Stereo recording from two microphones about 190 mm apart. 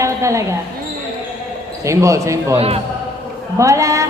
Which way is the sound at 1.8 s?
15° right (ahead or behind).